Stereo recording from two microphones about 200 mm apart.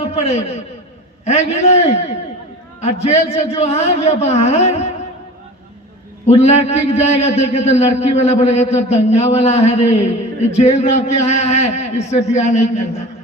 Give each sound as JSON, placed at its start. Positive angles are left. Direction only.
{"t": 0.3, "sound": "a man's voice", "side_deg": 30}
{"t": 6.2, "sound": "a man's voice", "side_deg": 30}